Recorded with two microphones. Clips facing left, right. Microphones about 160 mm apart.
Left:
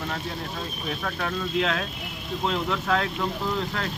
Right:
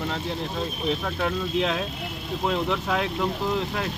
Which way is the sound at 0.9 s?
20° right (ahead or behind).